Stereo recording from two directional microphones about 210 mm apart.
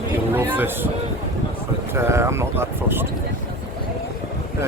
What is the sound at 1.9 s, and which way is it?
Speech, 10° right (ahead or behind).